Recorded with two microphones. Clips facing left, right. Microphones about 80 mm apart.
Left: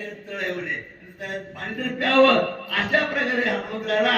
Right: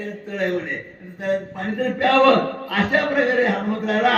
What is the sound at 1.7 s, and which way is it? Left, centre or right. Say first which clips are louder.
A man's voice: right 1 dB; right.